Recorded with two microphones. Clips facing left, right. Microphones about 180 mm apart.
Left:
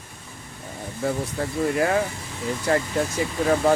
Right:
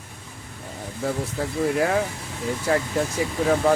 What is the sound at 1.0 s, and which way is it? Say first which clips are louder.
Speech: left 1 dB; centre (ahead or behind).